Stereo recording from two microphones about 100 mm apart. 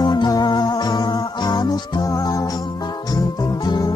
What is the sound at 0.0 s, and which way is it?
Music, 45° left (ahead or behind).